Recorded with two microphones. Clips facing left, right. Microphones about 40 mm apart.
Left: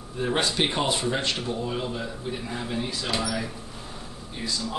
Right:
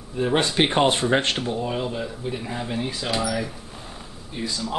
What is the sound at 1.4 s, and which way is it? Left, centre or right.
Speech, right.